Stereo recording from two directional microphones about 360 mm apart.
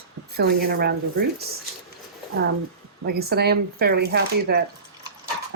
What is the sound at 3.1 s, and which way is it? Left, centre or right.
Speech, right.